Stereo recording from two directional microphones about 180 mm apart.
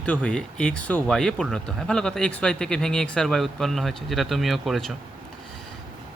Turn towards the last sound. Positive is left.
turn(degrees=0)  # may be behind; listen again after turning